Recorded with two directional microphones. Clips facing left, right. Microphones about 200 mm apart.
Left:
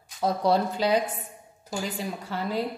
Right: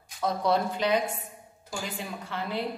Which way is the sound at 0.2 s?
30° left (ahead or behind).